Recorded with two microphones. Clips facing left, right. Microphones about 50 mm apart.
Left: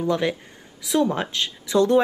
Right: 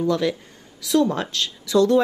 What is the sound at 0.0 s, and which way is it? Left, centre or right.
Speech, left.